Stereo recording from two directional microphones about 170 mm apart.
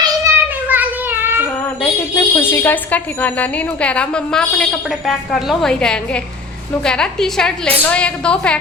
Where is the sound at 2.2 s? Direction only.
15° left (ahead or behind).